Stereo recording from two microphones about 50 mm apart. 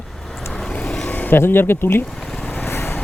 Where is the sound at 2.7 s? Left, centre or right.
Left.